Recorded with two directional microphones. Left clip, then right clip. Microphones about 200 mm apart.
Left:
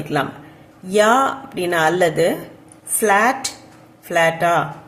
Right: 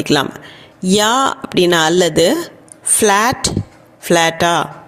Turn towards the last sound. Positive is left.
turn(degrees=-45)  # may be behind; listen again after turning